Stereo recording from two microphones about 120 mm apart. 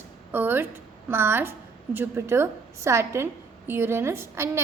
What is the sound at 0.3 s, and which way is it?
A woman's voice, 15° right (ahead or behind).